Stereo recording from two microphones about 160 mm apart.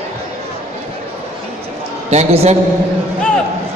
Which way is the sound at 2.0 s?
40° right (ahead or behind).